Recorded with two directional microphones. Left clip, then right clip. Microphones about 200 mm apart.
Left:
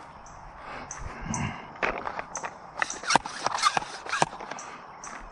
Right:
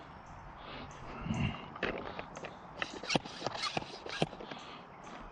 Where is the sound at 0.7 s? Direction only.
20° left (ahead or behind).